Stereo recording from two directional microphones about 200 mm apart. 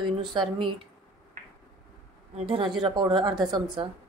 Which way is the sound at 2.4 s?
25° right (ahead or behind).